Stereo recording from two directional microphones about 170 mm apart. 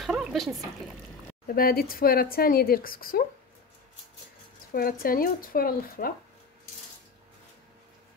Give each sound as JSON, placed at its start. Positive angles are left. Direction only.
{"t": 0.0, "sound": "a sound", "side_deg": 0}
{"t": 1.5, "sound": "speech", "side_deg": 60}
{"t": 4.7, "sound": "speech", "side_deg": 60}